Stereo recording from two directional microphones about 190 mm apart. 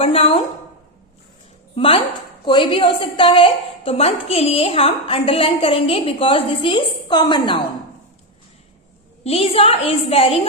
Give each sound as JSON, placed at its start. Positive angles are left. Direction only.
{"t": 0.0, "sound": "a woman's voice", "side_deg": 30}
{"t": 1.7, "sound": "a woman's voice", "side_deg": 30}
{"t": 9.2, "sound": "a woman's voice", "side_deg": 30}